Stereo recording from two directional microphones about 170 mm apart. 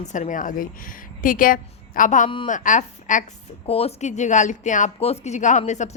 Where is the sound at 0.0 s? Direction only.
45° left (ahead or behind).